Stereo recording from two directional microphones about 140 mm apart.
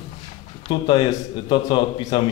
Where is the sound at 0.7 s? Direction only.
35° left (ahead or behind).